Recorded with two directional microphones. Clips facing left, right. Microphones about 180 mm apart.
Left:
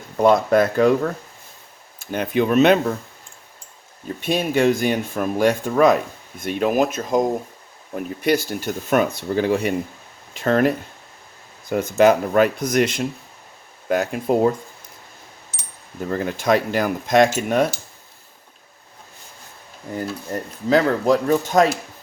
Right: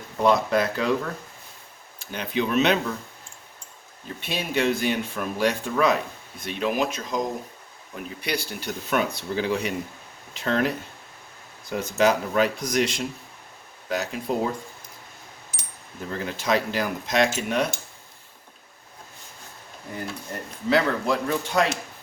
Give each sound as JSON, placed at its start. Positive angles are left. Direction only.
{"t": 0.2, "sound": "speech", "side_deg": 50}
{"t": 2.0, "sound": "speech", "side_deg": 50}
{"t": 4.2, "sound": "speech", "side_deg": 50}
{"t": 16.0, "sound": "speech", "side_deg": 50}
{"t": 19.9, "sound": "speech", "side_deg": 45}